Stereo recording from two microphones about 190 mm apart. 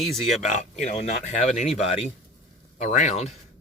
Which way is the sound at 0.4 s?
35° left (ahead or behind).